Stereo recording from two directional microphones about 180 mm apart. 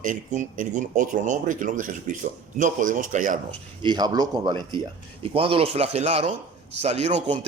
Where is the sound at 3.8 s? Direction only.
20° right (ahead or behind); by 7.4 s 40° right (ahead or behind).